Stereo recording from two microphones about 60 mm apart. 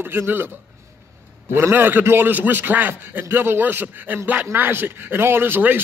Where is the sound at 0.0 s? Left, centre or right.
Right.